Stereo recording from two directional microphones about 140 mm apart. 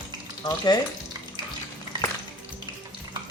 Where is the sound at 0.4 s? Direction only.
30° left (ahead or behind).